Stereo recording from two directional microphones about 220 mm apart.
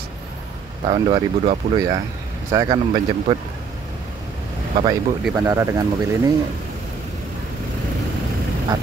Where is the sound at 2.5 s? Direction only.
20° right (ahead or behind).